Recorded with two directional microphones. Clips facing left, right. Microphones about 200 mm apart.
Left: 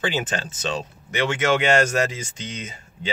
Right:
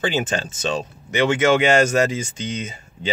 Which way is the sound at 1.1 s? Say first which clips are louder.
Right 4 dB; centre (ahead or behind).